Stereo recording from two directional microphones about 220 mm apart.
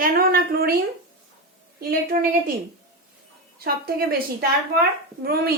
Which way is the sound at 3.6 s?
45° right (ahead or behind).